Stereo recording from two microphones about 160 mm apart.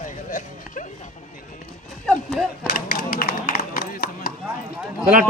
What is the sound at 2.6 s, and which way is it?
Speech, 65° left (ahead or behind).